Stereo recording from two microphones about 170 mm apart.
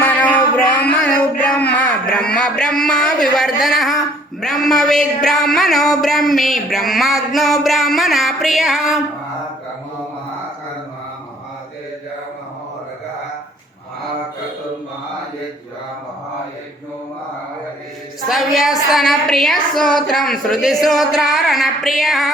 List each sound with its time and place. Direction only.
0.0 s music: 10° left (ahead or behind)
18.3 s music: centre (ahead or behind)